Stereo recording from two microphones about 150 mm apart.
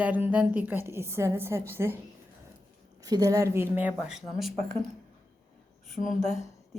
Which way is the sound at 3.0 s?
25° right (ahead or behind).